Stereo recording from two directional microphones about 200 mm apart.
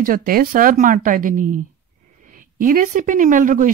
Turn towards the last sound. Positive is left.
turn(degrees=-40)  # may be behind; listen again after turning